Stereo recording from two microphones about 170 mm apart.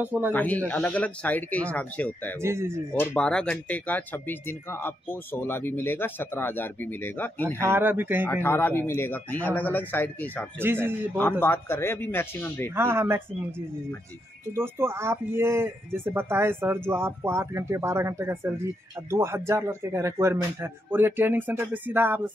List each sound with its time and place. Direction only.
0.0 s speech: 10° right (ahead or behind)
0.3 s speech: 10° left (ahead or behind)
2.4 s speech: 15° right (ahead or behind)
2.9 s speech: 10° left (ahead or behind)
7.6 s speech: 15° right (ahead or behind)
8.3 s speech: 15° left (ahead or behind)
10.6 s speech: 15° right (ahead or behind)
11.1 s speech: 10° left (ahead or behind)
12.7 s speech: 15° right (ahead or behind)
14.5 s speech: 15° right (ahead or behind)